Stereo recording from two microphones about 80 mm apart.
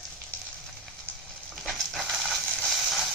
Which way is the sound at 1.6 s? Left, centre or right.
Centre.